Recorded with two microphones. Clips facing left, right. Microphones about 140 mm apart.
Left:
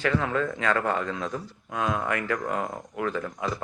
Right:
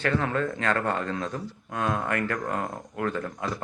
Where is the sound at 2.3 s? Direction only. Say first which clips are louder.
Left 1 dB; 15° left (ahead or behind).